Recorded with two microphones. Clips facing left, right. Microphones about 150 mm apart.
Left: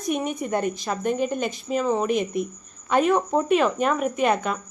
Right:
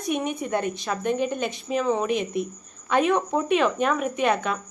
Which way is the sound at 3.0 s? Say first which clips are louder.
Left 2 dB; 10° left (ahead or behind).